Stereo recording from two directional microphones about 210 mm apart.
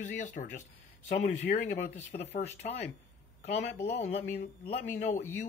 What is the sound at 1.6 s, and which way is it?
Speech, 35° left (ahead or behind).